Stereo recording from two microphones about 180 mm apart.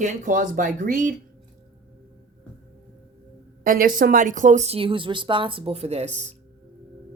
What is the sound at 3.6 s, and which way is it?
A woman's voice, 50° right (ahead or behind).